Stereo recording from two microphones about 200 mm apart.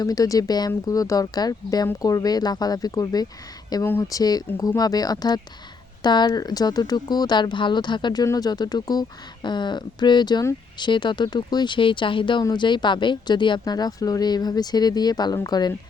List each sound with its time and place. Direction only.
0.0 s speech: 20° left (ahead or behind)